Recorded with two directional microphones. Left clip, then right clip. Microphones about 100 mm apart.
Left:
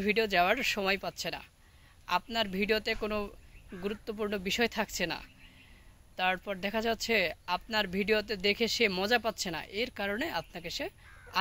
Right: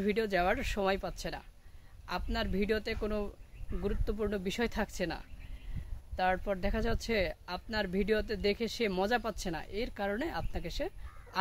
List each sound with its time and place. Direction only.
0.0 s speech: 40° right (ahead or behind)